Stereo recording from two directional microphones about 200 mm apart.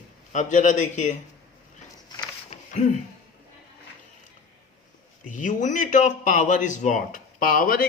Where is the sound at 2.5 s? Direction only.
35° left (ahead or behind).